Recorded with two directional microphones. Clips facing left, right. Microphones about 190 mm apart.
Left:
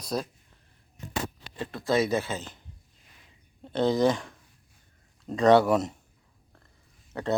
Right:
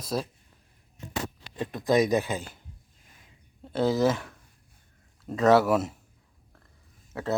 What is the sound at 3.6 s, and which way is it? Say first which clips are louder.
A man's voice: left 1 dB; 5° right (ahead or behind).